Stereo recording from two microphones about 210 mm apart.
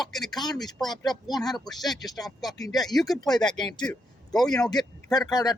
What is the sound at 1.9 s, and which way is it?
Speech, 20° left (ahead or behind).